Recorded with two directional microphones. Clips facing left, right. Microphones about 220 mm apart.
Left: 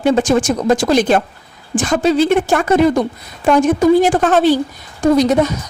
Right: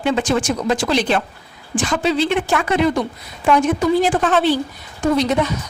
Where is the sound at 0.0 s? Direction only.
45° left (ahead or behind).